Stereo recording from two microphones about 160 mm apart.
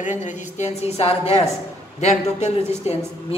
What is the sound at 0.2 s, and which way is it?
A man's voice, 45° left (ahead or behind).